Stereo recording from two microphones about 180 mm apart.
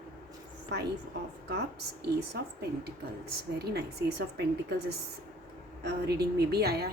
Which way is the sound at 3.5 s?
65° right (ahead or behind).